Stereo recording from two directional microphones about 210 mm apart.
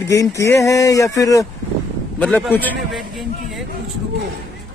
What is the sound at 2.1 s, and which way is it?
Speech, 5° left (ahead or behind).